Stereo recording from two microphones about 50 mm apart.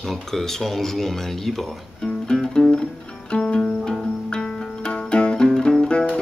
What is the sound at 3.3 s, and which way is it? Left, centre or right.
Music, centre.